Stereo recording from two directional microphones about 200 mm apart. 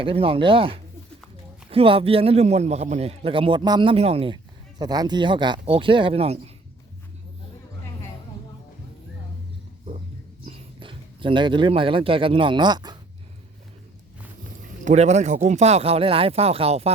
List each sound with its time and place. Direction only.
0.0 s a man's voice: 25° right (ahead or behind)
10.4 s speech: 25° right (ahead or behind)
14.8 s speech: 35° right (ahead or behind)